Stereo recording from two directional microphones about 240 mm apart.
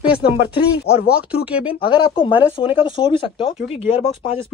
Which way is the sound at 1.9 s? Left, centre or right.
Centre.